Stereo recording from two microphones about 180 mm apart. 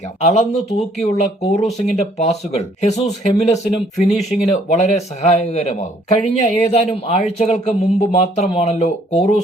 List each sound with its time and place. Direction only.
0.2 s speech: 40° left (ahead or behind)
4.1 s speech: centre (ahead or behind)
4.5 s speech: 40° left (ahead or behind)